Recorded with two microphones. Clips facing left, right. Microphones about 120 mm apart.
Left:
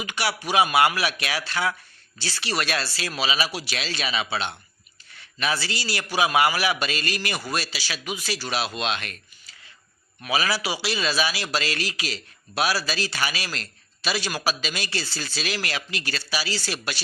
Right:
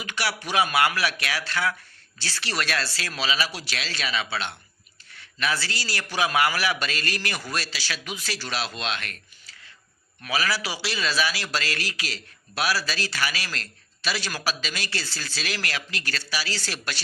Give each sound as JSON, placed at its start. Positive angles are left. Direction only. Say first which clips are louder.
{"t": 0.0, "sound": "a man's voice", "louder": "left 2 dB", "side_deg": 15}